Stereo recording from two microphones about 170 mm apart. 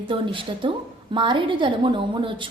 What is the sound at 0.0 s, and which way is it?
A woman's voice, 30° right (ahead or behind).